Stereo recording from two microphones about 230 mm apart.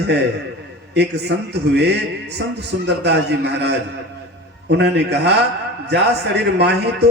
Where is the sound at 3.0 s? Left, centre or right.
Right.